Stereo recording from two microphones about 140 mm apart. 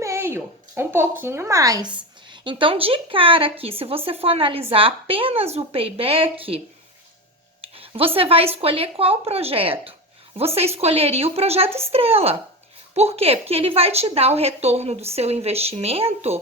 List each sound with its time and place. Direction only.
0.0 s a woman's voice: 20° right (ahead or behind); by 6.6 s 40° right (ahead or behind)
7.6 s a woman's voice: 40° right (ahead or behind)